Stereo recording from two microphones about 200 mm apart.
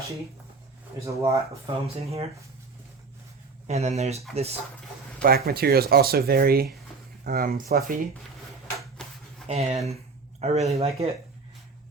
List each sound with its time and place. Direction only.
1.0 s speech: 15° right (ahead or behind)
1.9 s speech: 30° right (ahead or behind)
3.7 s speech: 35° right (ahead or behind)
5.2 s speech: 50° right (ahead or behind)
9.0 s dishes: 5° left (ahead or behind)
9.5 s speech: 30° right (ahead or behind)